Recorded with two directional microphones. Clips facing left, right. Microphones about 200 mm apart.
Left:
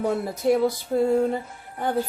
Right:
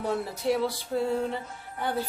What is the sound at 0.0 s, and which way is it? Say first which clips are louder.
Speech: left 5 dB; 45° left (ahead or behind).